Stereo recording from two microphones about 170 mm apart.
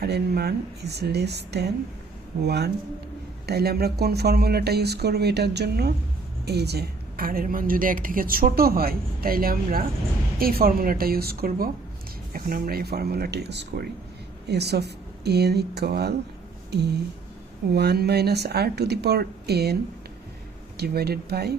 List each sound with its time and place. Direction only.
0.0 s a woman's voice: 70° right (ahead or behind)
17.7 s speech: 70° right (ahead or behind)
20.7 s speech: 70° right (ahead or behind)